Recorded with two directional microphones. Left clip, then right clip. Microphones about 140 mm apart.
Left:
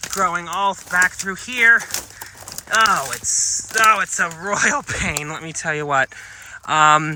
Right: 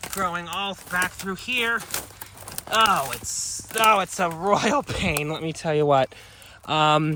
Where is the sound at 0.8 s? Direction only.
25° left (ahead or behind).